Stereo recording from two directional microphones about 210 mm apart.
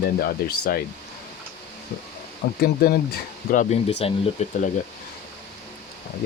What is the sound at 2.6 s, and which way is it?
Speech, 45° left (ahead or behind).